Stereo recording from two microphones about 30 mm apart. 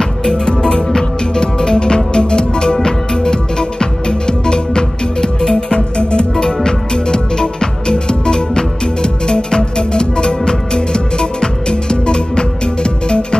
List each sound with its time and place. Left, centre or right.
0.3 s music: left